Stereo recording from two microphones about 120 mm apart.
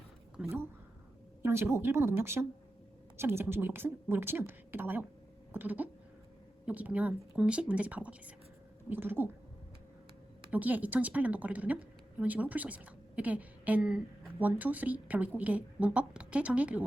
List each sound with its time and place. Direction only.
0.4 s a woman's voice: 5° right (ahead or behind)
1.4 s a woman's voice: 20° right (ahead or behind)
10.5 s a woman's voice: 15° right (ahead or behind)